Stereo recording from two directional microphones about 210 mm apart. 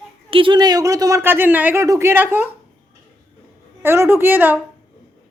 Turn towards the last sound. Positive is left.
turn(degrees=-10)  # may be behind; listen again after turning